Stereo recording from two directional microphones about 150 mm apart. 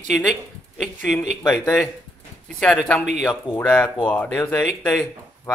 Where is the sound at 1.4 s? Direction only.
15° left (ahead or behind).